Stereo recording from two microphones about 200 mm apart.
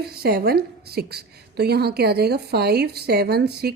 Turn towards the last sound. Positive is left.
turn(degrees=-55)  # may be behind; listen again after turning